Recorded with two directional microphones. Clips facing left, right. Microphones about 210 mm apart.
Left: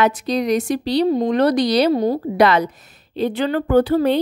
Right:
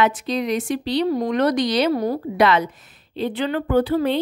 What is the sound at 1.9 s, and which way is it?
Speech, 20° left (ahead or behind).